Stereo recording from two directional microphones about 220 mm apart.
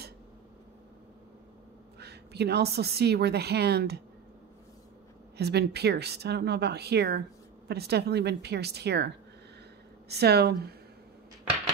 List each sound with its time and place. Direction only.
2.0 s a woman's voice: 50° right (ahead or behind)
5.4 s a woman's voice: 50° right (ahead or behind)